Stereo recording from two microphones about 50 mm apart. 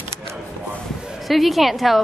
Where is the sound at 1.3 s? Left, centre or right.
Centre.